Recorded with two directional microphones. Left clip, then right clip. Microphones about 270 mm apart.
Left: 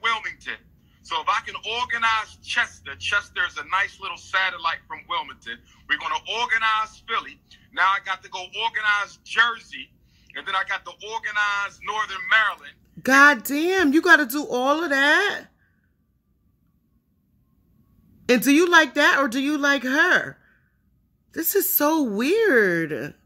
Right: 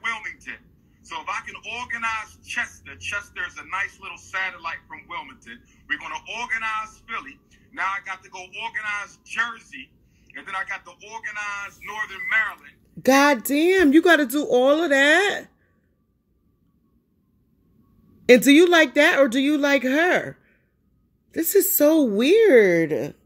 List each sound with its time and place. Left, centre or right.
0.0 s a sound: centre
1.0 s speech: centre
13.5 s speech: centre
18.2 s speech: centre
21.8 s speech: centre